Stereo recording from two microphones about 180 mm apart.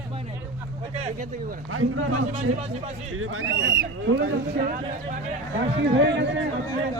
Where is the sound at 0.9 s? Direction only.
35° right (ahead or behind).